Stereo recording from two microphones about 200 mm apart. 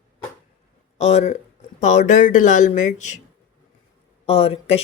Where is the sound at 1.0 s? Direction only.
35° left (ahead or behind).